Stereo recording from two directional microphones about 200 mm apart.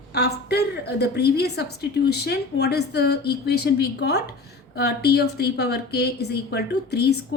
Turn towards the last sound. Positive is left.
turn(degrees=55)  # may be behind; listen again after turning